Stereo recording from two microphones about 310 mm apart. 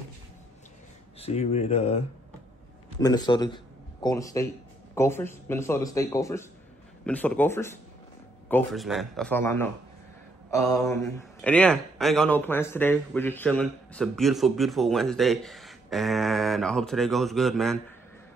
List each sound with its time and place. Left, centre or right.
1.2 s speech: centre
10.9 s a man's voice: centre